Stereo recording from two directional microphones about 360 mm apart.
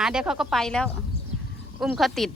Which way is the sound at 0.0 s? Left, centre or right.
Centre.